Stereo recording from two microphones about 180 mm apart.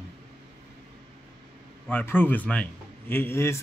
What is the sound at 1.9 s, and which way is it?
Speech, 10° left (ahead or behind).